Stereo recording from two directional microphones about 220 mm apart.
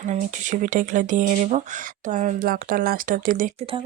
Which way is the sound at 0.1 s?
35° right (ahead or behind).